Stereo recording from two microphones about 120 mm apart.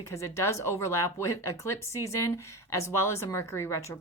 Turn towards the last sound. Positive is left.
turn(degrees=25)  # may be behind; listen again after turning